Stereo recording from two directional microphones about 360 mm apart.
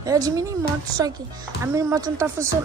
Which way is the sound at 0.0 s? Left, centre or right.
Centre.